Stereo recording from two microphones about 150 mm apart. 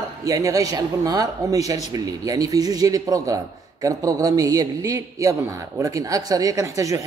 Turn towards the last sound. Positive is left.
turn(degrees=-20)  # may be behind; listen again after turning